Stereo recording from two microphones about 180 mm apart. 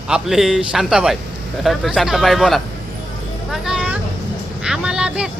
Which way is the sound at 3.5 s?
5° right (ahead or behind).